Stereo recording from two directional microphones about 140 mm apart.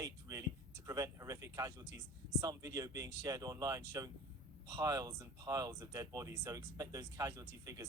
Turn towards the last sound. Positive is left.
turn(degrees=-25)  # may be behind; listen again after turning